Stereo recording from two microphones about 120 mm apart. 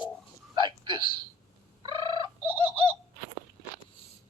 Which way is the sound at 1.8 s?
45° right (ahead or behind).